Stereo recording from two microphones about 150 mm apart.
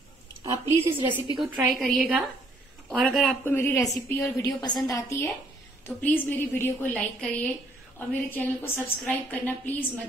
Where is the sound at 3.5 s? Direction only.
15° left (ahead or behind).